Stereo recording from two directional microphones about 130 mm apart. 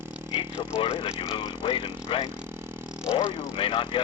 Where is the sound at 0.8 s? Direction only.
40° left (ahead or behind).